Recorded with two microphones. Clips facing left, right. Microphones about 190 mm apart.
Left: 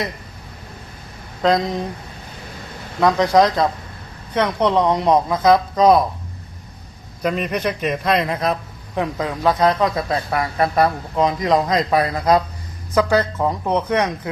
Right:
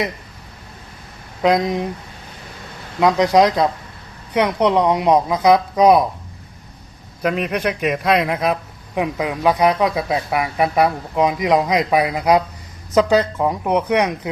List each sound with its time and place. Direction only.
1.4 s speech: 15° right (ahead or behind)
3.0 s speech: 15° right (ahead or behind)
7.2 s speech: 5° right (ahead or behind)